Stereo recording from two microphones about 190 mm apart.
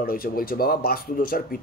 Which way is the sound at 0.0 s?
50° left (ahead or behind).